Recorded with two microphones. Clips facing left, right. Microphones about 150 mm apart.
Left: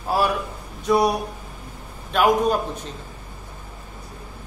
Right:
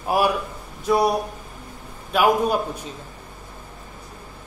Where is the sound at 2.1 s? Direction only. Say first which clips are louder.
Even; 10° right (ahead or behind).